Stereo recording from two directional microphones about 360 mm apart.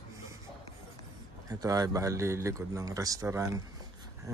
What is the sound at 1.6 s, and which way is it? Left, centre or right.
A man's voice, centre.